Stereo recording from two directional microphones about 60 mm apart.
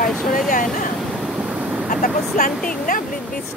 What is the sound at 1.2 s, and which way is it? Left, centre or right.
Vehicle, right.